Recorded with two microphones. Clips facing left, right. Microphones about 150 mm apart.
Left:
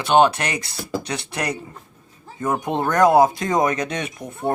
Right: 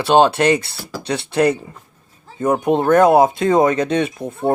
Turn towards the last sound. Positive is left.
turn(degrees=-25)  # may be behind; listen again after turning